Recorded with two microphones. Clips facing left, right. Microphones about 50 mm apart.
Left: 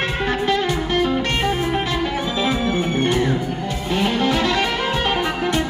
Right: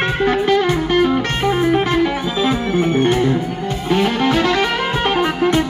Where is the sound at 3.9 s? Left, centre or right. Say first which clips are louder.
Right 4 dB; right.